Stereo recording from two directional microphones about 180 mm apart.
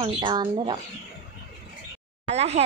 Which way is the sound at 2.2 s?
35° right (ahead or behind).